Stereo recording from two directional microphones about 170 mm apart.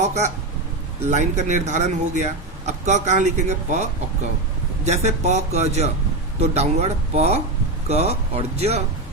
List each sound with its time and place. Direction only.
0.0 s a man's voice: 40° right (ahead or behind)